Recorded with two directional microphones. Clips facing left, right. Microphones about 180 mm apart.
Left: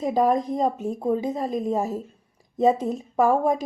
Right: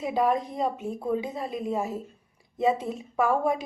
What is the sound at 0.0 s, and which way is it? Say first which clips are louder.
A woman's voice: left 4 dB; 40° left (ahead or behind).